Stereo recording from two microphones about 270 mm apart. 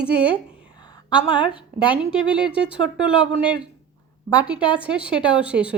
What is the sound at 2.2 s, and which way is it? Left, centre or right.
Speech, centre.